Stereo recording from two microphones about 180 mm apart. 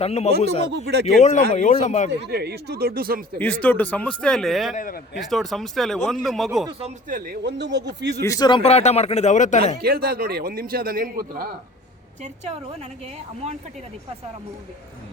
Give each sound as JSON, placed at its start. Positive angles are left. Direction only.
{"t": 0.0, "sound": "a man's voice", "side_deg": 35}
{"t": 2.2, "sound": "a man's voice", "side_deg": -65}
{"t": 3.3, "sound": "speech", "side_deg": 10}
{"t": 4.7, "sound": "speech", "side_deg": 50}
{"t": 5.2, "sound": "speech", "side_deg": 0}
{"t": 6.7, "sound": "speech", "side_deg": -30}
{"t": 7.4, "sound": "a man's voice", "side_deg": -70}
{"t": 8.2, "sound": "a man's voice", "side_deg": 20}
{"t": 9.8, "sound": "a man's voice", "side_deg": -55}
{"t": 12.2, "sound": "a woman's voice", "side_deg": -35}